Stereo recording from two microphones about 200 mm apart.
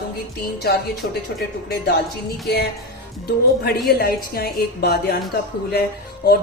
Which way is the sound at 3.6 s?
50° left (ahead or behind).